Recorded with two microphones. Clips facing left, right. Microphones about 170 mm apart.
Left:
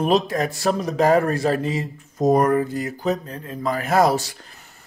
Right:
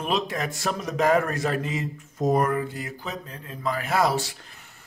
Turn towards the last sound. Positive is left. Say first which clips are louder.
# left 5 dB
turn(degrees=40)  # may be behind; listen again after turning